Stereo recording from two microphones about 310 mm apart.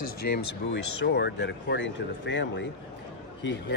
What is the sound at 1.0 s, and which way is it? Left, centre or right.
Speech, left.